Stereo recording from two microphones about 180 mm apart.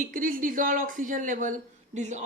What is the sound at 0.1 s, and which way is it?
Speech, 50° right (ahead or behind).